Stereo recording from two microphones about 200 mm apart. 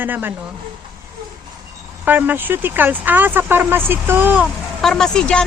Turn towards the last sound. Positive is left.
turn(degrees=5)  # may be behind; listen again after turning